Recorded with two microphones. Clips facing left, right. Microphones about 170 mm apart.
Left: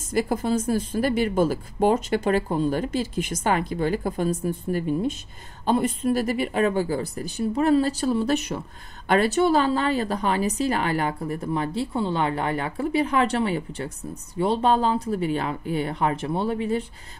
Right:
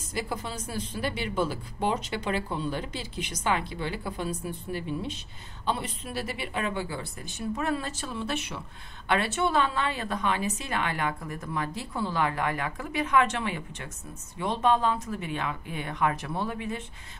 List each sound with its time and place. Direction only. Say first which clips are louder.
0.1 s a woman's voice: left 11 dB; 50° left (ahead or behind); by 16.8 s 30° left (ahead or behind)